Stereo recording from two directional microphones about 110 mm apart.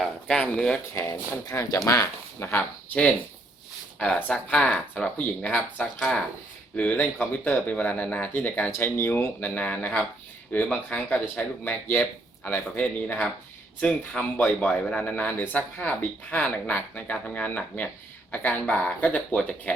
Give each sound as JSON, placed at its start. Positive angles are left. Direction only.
{"t": 0.0, "sound": "speech", "side_deg": 10}
{"t": 1.5, "sound": "a man's voice", "side_deg": 30}